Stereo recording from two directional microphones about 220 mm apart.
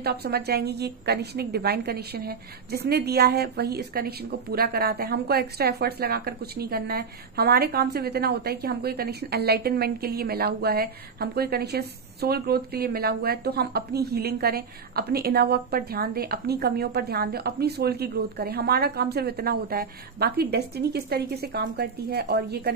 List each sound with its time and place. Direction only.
0.0 s a woman's voice: 45° right (ahead or behind)